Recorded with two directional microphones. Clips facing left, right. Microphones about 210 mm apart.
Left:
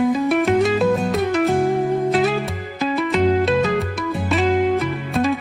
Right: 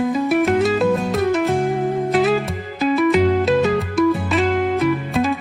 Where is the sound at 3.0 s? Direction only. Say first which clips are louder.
Right 1 dB; centre (ahead or behind).